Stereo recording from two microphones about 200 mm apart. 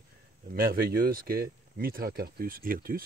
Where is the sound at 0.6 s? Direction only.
50° right (ahead or behind).